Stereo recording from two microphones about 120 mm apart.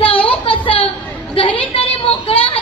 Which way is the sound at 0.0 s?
50° left (ahead or behind).